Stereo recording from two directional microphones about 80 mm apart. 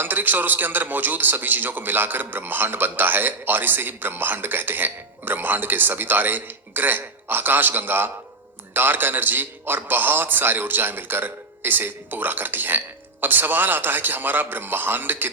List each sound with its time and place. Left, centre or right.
0.0 s a man's voice: right